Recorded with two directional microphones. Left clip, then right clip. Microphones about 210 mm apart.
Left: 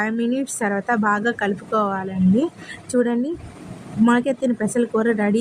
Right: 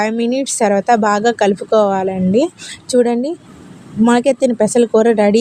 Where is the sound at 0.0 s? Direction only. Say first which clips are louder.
Right 6 dB; 25° right (ahead or behind).